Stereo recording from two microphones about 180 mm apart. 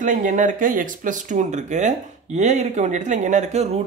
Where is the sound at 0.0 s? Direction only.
45° right (ahead or behind).